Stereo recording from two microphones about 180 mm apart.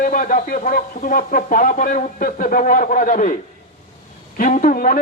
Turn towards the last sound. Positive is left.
turn(degrees=50)  # may be behind; listen again after turning